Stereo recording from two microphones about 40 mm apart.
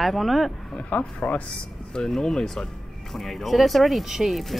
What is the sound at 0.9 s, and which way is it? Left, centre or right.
Speech, left.